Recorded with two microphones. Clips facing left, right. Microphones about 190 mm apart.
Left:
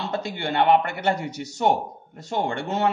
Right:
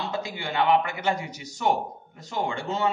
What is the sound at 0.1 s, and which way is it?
A man's voice, 60° left (ahead or behind).